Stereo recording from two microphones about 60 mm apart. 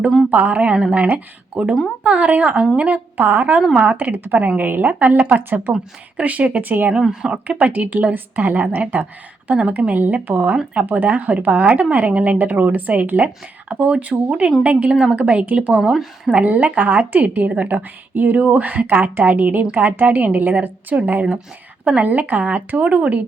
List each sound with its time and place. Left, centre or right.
0.3 s a woman's voice: right
5.4 s a woman's voice: right
6.1 s a woman's voice: right
6.9 s speech: centre
7.4 s a woman's voice: right
15.7 s speech: centre
16.3 s a woman's voice: right
21.8 s a woman's voice: right